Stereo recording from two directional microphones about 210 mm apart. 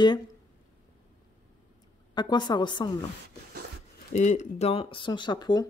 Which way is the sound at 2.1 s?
20° left (ahead or behind).